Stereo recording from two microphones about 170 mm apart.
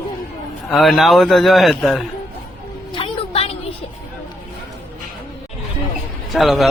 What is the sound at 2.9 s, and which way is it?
Music, 30° left (ahead or behind).